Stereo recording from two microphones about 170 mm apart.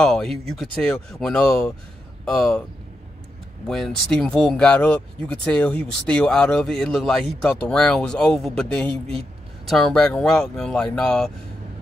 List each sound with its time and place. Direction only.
0.0 s speech: 5° left (ahead or behind)
3.6 s speech: centre (ahead or behind)